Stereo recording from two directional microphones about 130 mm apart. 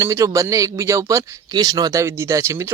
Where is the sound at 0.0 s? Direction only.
25° right (ahead or behind).